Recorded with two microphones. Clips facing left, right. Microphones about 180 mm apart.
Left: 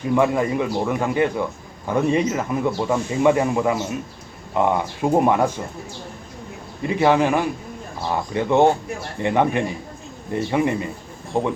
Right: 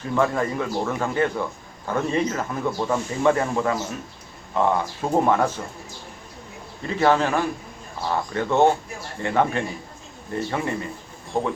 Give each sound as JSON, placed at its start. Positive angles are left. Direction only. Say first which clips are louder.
{"t": 0.0, "sound": "speech", "louder": "left 4 dB", "side_deg": 15}
{"t": 6.8, "sound": "speech", "louder": "left 3 dB", "side_deg": 15}